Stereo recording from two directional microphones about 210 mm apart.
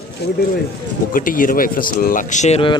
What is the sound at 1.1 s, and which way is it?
Speech, 40° left (ahead or behind).